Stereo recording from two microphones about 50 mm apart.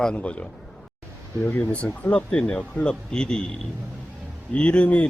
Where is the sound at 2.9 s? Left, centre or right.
Centre.